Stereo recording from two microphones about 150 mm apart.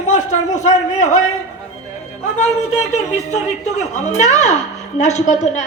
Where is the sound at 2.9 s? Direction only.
50° left (ahead or behind).